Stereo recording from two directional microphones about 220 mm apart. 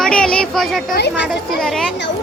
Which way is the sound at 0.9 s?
50° left (ahead or behind).